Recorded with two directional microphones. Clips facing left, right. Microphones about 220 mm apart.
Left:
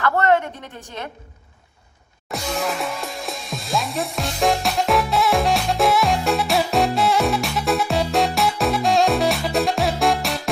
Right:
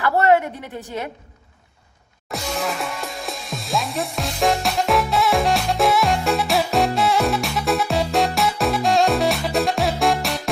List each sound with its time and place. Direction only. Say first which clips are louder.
0.0 s a sound: right 2 dB; 15° right (ahead or behind)
0.9 s a woman's voice: right 4 dB; 15° right (ahead or behind)
2.3 s music: left 1 dB; centre (ahead or behind)